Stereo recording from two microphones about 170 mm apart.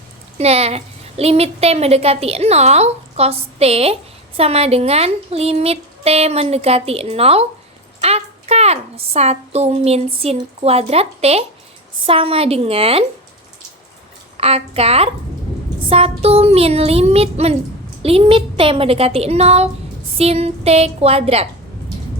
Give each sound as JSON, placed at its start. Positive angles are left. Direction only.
{"t": 0.3, "sound": "a woman's voice", "side_deg": -35}
{"t": 14.3, "sound": "a woman's voice", "side_deg": -35}